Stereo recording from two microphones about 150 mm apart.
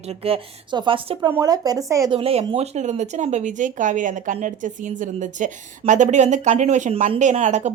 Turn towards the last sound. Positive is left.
turn(degrees=-50)  # may be behind; listen again after turning